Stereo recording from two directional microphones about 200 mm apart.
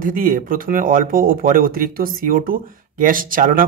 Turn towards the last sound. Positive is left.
turn(degrees=-45)  # may be behind; listen again after turning